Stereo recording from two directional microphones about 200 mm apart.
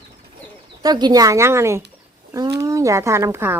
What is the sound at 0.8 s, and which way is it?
Speech, 20° right (ahead or behind).